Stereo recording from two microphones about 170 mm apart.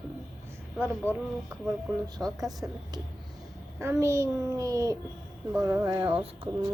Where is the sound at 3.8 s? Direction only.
15° right (ahead or behind).